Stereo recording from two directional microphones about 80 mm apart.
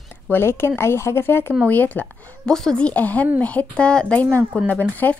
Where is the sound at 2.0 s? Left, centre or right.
Centre.